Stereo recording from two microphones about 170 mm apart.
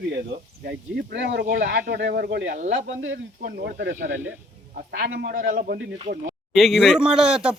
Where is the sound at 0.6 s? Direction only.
70° right (ahead or behind).